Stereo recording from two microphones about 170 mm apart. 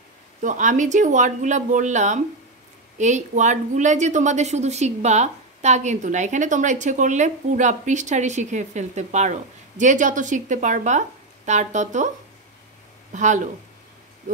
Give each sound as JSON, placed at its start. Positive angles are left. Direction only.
{"t": 0.4, "sound": "a woman's voice", "side_deg": -45}
{"t": 13.1, "sound": "a woman's voice", "side_deg": -45}